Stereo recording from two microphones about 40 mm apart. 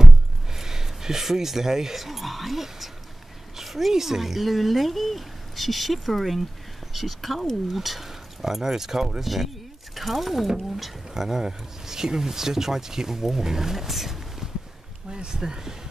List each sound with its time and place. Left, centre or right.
0.0 s speech: centre
15.0 s speech: centre